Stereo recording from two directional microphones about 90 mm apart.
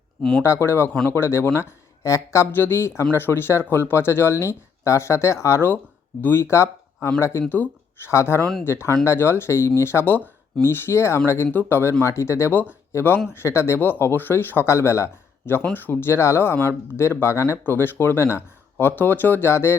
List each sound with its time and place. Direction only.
0.2 s speech: 5° left (ahead or behind)
0.4 s speech: 30° left (ahead or behind)